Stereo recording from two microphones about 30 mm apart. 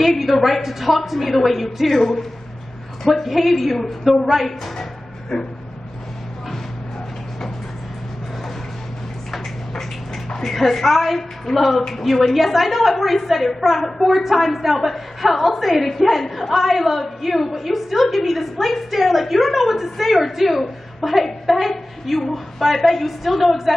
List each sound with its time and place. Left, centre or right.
0.0 s a woman's voice: centre
2.0 s a woman's voice: centre
3.2 s a woman's voice: centre
5.3 s speech: left
9.3 s a sound: centre
10.8 s a woman's voice: centre